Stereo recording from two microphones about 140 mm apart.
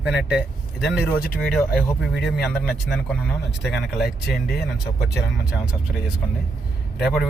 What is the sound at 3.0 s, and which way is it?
Speech, 10° left (ahead or behind).